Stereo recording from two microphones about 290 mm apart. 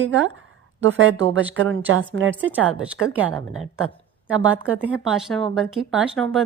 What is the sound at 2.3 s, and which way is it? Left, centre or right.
Speech, centre.